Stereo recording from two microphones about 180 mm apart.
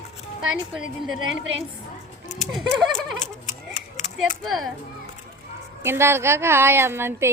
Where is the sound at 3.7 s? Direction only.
40° left (ahead or behind).